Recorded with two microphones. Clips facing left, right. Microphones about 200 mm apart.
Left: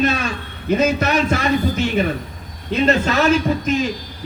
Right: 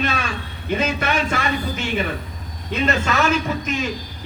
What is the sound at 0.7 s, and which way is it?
A man's voice, 40° left (ahead or behind).